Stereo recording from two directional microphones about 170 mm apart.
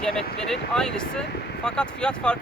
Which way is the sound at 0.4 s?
5° left (ahead or behind).